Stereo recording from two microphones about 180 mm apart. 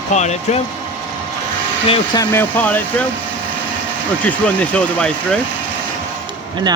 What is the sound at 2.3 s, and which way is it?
Speech, 10° left (ahead or behind).